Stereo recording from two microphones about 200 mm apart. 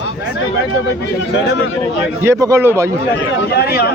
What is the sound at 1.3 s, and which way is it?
Speech, 60° left (ahead or behind).